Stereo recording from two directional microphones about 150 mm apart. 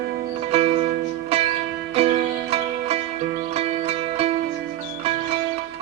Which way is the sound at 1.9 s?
40° right (ahead or behind).